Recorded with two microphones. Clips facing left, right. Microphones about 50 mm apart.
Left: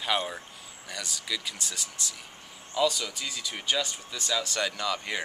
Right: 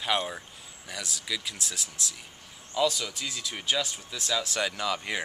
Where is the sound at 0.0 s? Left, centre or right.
Centre.